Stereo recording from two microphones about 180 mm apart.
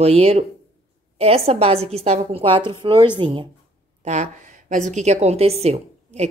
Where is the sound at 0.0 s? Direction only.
35° right (ahead or behind).